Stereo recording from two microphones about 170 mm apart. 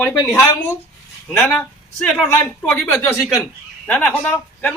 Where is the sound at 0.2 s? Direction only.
15° left (ahead or behind).